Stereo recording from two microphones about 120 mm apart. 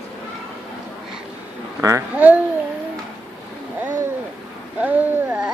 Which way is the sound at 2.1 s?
15° right (ahead or behind).